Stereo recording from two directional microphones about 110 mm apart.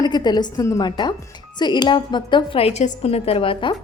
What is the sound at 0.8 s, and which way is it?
A woman's voice, 40° left (ahead or behind).